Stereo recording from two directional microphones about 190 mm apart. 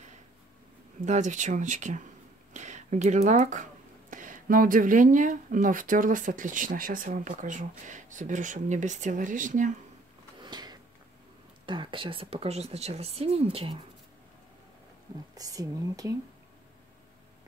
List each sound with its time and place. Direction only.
1.0 s speech: 40° right (ahead or behind)
10.4 s a sound: 20° right (ahead or behind)
11.6 s speech: 25° right (ahead or behind)
15.3 s speech: 20° right (ahead or behind)